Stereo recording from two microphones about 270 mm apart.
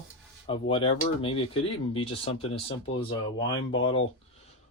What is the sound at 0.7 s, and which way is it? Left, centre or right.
Speech, centre.